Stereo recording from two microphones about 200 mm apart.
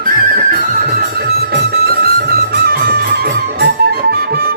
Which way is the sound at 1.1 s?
50° right (ahead or behind).